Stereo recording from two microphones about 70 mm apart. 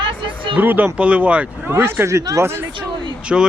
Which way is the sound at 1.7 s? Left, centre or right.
Right.